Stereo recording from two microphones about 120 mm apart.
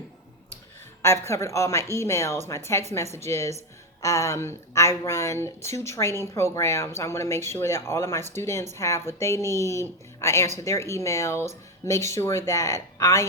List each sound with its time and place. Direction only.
1.0 s a woman's voice: 20° left (ahead or behind)